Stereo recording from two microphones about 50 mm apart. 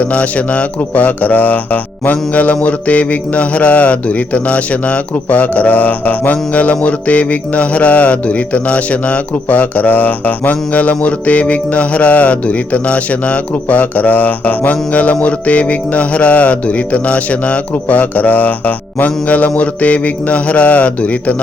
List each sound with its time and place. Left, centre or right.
0.0 s speech: left
2.6 s mantra: left